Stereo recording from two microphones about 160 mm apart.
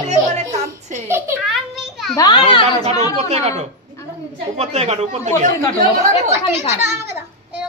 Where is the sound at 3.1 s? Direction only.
45° right (ahead or behind).